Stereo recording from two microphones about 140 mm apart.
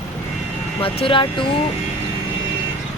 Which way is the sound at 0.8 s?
40° left (ahead or behind).